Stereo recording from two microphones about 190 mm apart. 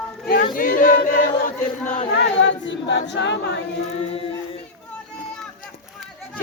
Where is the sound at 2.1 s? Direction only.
65° left (ahead or behind).